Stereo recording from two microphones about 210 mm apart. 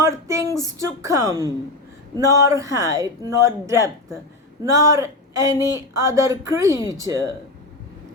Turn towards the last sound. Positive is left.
turn(degrees=-15)  # may be behind; listen again after turning